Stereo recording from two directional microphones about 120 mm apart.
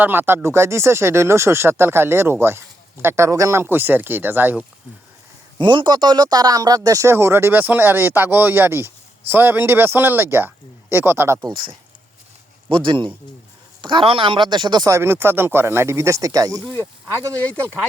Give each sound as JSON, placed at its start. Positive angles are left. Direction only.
{"t": 0.0, "sound": "speech", "side_deg": -15}
{"t": 5.5, "sound": "speech", "side_deg": -40}
{"t": 11.4, "sound": "a man's voice", "side_deg": -45}
{"t": 14.9, "sound": "speech", "side_deg": -20}
{"t": 17.4, "sound": "speech", "side_deg": 15}